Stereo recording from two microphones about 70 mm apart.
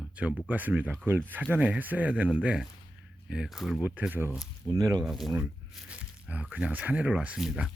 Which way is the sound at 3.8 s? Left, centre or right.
Right.